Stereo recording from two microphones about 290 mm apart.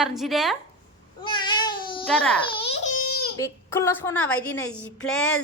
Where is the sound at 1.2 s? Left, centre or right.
Centre.